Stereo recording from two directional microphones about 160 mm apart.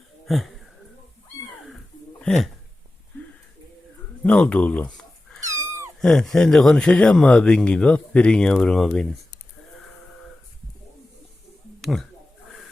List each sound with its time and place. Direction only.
0.3 s speech: centre (ahead or behind)
2.2 s speech: 5° left (ahead or behind)
4.2 s a sound: 10° left (ahead or behind)
5.4 s cat: 15° right (ahead or behind)
6.0 s speech: 5° left (ahead or behind)
11.8 s speech: centre (ahead or behind)